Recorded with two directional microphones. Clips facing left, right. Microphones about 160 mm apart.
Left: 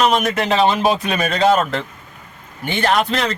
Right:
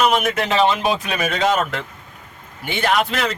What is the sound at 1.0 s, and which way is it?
Speech, centre (ahead or behind).